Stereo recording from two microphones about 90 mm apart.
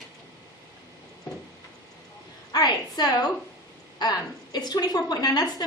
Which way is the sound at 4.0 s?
50° left (ahead or behind).